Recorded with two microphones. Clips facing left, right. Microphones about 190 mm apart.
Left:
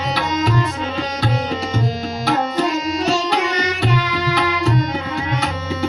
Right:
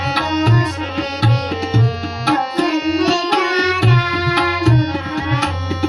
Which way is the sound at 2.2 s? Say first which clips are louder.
Right 3 dB; 65° right (ahead or behind).